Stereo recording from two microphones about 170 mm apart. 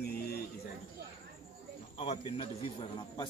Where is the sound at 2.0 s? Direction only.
35° left (ahead or behind).